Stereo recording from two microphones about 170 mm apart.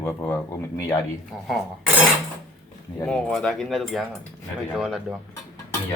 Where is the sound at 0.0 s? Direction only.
15° left (ahead or behind).